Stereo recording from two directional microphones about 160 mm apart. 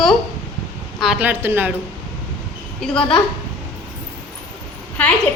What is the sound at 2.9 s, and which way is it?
Speech, 30° left (ahead or behind).